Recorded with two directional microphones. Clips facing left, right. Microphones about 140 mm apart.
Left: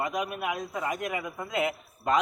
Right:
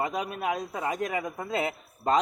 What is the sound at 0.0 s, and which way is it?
A man's voice, 30° right (ahead or behind).